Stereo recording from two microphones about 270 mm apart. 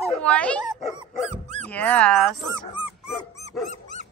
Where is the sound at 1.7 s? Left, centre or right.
Centre.